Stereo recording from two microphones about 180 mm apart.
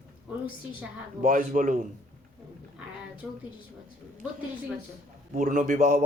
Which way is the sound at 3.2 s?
5° right (ahead or behind).